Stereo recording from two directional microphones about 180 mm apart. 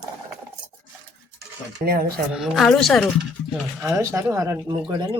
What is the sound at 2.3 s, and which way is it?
Speech, 5° right (ahead or behind).